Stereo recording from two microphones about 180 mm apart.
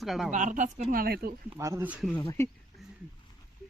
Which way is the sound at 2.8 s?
Centre (ahead or behind).